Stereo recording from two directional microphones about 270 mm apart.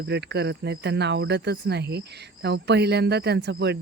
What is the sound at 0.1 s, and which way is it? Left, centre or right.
Speech, right.